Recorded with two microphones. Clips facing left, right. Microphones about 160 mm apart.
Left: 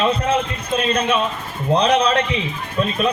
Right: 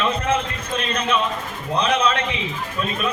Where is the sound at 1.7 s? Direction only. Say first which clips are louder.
Left 3 dB; 35° left (ahead or behind).